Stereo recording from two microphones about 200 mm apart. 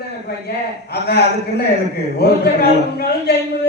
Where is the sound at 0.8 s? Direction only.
55° left (ahead or behind).